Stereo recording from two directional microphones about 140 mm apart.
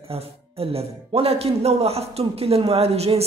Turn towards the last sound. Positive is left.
turn(degrees=-45)  # may be behind; listen again after turning